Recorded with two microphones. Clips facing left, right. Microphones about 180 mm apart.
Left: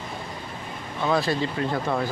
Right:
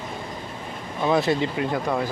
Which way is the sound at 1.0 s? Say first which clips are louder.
Right 3 dB; 20° right (ahead or behind).